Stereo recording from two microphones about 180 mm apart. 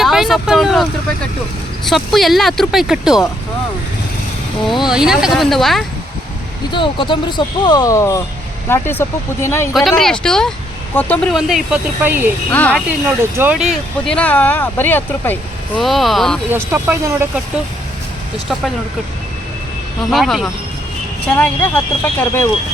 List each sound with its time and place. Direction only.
0.0 s speech: centre (ahead or behind)
4.9 s speech: 5° right (ahead or behind)
6.7 s speech: 30° left (ahead or behind)
9.7 s speech: centre (ahead or behind)
12.5 s speech: 10° left (ahead or behind)
13.3 s speech: 10° right (ahead or behind)
16.5 s speech: 10° right (ahead or behind)
20.1 s speech: centre (ahead or behind)